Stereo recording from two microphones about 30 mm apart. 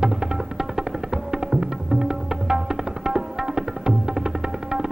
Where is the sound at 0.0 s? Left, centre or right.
Centre.